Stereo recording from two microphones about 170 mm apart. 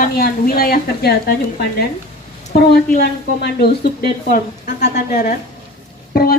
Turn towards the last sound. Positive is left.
turn(degrees=65)  # may be behind; listen again after turning